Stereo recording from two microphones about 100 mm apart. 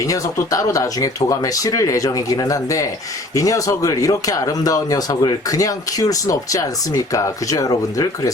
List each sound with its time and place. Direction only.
0.0 s speech: 35° left (ahead or behind)